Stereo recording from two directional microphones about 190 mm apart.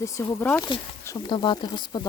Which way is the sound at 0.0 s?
15° left (ahead or behind).